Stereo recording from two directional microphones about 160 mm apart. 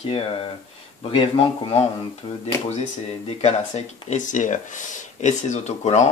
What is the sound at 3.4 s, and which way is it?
Speech, 40° left (ahead or behind).